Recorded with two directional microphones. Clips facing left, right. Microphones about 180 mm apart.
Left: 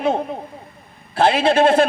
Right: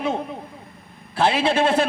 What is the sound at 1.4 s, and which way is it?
Speech, 50° left (ahead or behind).